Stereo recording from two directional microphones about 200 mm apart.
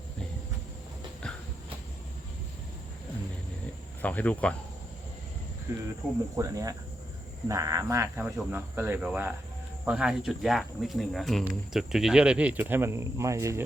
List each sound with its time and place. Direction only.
4.0 s speech: 5° left (ahead or behind)
5.7 s speech: 15° right (ahead or behind)